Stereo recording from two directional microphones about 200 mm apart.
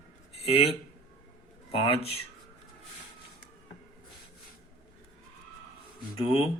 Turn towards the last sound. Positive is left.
turn(degrees=25)  # may be behind; listen again after turning